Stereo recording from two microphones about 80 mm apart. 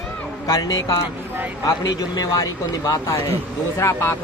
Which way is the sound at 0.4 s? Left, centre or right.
Left.